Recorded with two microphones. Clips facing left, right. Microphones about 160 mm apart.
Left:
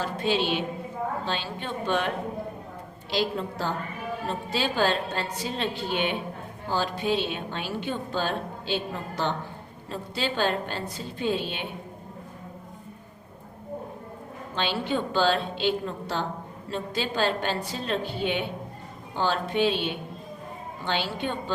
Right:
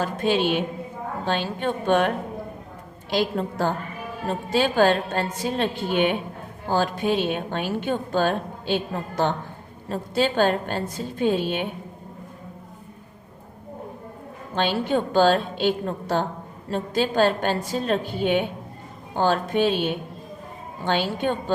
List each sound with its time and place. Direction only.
0.0 s a woman's voice: 50° right (ahead or behind)
14.5 s a woman's voice: 50° right (ahead or behind)